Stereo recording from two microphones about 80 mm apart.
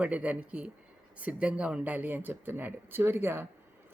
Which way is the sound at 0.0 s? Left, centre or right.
Centre.